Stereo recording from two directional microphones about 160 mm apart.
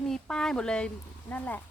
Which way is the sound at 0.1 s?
5° left (ahead or behind).